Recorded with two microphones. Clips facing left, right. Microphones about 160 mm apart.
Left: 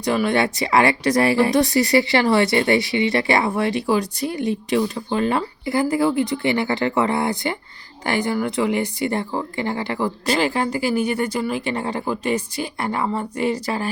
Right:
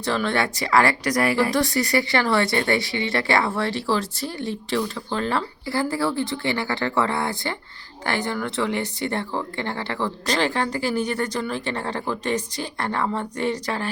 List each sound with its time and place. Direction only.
0.0 s speech: 15° left (ahead or behind)